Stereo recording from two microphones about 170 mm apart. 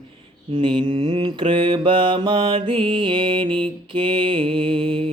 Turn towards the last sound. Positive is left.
turn(degrees=-30)  # may be behind; listen again after turning